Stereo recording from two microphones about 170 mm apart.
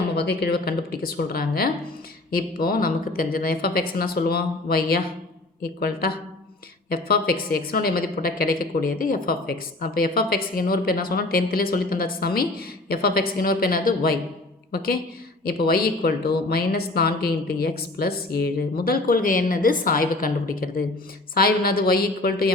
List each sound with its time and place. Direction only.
0.2 s a woman's voice: 70° left (ahead or behind)